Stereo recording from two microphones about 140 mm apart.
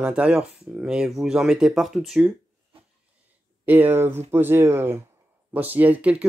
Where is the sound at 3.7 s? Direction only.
15° right (ahead or behind).